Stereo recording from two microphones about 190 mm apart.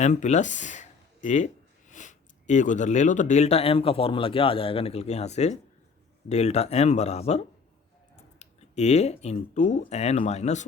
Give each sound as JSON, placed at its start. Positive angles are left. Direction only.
{"t": 0.0, "sound": "speech", "side_deg": 40}